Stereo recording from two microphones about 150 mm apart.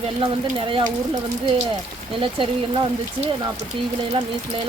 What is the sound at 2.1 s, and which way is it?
Speech, 35° right (ahead or behind).